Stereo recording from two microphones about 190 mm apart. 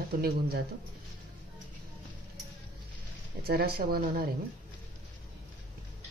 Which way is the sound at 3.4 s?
55° right (ahead or behind).